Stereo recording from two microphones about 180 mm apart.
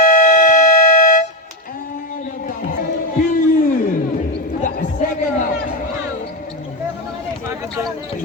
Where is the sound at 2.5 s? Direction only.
50° left (ahead or behind).